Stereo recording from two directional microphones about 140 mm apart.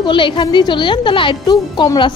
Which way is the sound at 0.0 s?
35° left (ahead or behind).